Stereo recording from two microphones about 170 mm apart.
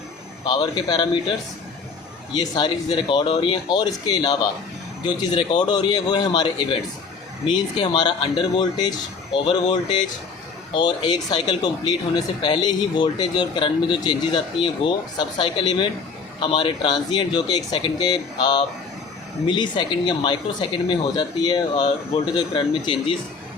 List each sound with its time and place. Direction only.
0.4 s speech: 25° left (ahead or behind)